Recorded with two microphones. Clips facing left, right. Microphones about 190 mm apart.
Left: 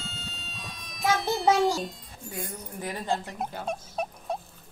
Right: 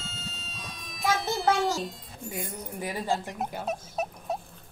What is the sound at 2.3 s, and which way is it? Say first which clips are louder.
Speech: right 1 dB; 10° right (ahead or behind).